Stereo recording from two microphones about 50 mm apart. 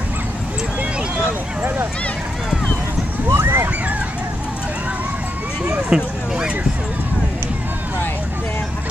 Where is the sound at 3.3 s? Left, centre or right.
Right.